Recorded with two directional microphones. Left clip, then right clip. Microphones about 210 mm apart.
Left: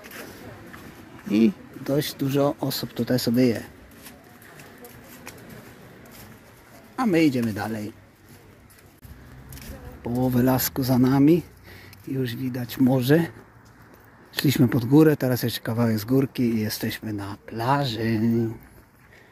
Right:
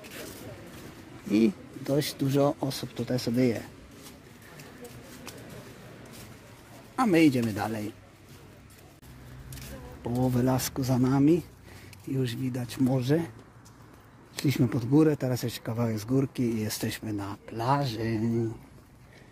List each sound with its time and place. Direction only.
1.2 s speech: centre (ahead or behind)
2.7 s speech: 20° left (ahead or behind)
7.0 s speech: centre (ahead or behind)
10.0 s speech: 10° left (ahead or behind)
12.1 s speech: centre (ahead or behind)
12.9 s speech: 20° left (ahead or behind)
14.3 s speech: 15° left (ahead or behind)